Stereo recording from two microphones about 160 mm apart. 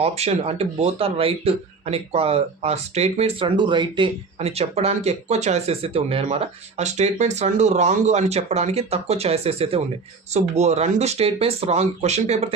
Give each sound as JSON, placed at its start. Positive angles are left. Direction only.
{"t": 0.0, "sound": "speech", "side_deg": -40}
{"t": 3.4, "sound": "speech", "side_deg": -30}
{"t": 4.4, "sound": "speech", "side_deg": -40}